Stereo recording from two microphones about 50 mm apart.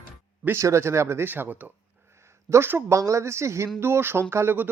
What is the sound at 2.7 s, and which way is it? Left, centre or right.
Speech, right.